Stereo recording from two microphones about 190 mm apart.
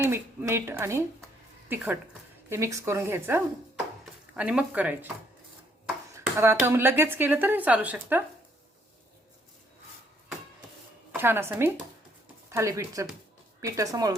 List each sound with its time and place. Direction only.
0.0 s speech: 10° right (ahead or behind)
6.1 s speech: 15° right (ahead or behind)
11.2 s speech: 10° right (ahead or behind)